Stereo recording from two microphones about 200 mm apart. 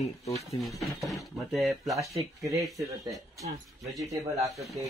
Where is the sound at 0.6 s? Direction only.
Centre (ahead or behind).